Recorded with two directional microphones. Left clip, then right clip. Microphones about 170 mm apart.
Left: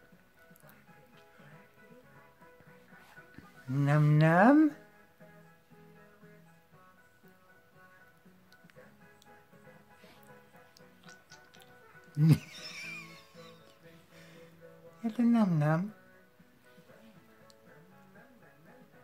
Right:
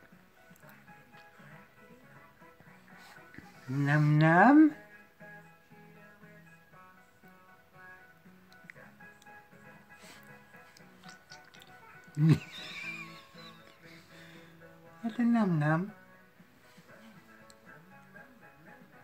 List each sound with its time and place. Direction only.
3.8 s speech: 50° left (ahead or behind)
12.2 s music: 50° left (ahead or behind)
15.0 s speech: 50° left (ahead or behind)